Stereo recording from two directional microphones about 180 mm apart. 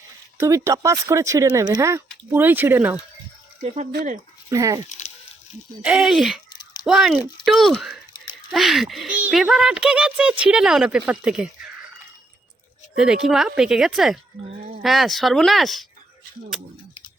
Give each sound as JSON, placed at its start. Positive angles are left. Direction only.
{"t": 0.3, "sound": "speech", "side_deg": -15}
{"t": 3.6, "sound": "speech", "side_deg": -40}
{"t": 4.4, "sound": "speech", "side_deg": -15}
{"t": 5.8, "sound": "speech", "side_deg": -5}
{"t": 6.5, "sound": "a sound", "side_deg": 25}
{"t": 6.8, "sound": "speech", "side_deg": 0}
{"t": 8.1, "sound": "a sound", "side_deg": 25}
{"t": 8.5, "sound": "speech", "side_deg": 0}
{"t": 13.0, "sound": "speech", "side_deg": -5}